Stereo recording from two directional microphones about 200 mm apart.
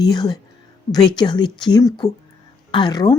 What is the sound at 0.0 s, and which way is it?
A woman's voice, 20° left (ahead or behind).